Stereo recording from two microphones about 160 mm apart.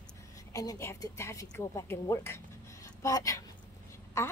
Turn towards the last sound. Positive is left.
turn(degrees=20)  # may be behind; listen again after turning